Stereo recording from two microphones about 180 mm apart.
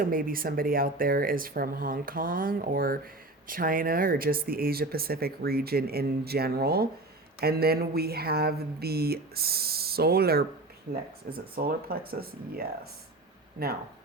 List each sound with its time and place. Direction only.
0.0 s speech: 55° right (ahead or behind)